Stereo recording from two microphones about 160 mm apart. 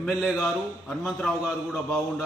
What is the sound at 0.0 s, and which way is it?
A man's voice, centre (ahead or behind).